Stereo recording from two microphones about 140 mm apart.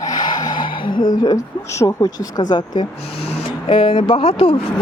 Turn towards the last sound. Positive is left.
turn(degrees=40)  # may be behind; listen again after turning